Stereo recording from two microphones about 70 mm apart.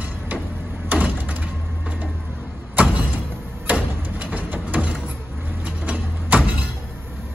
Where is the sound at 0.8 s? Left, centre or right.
Right.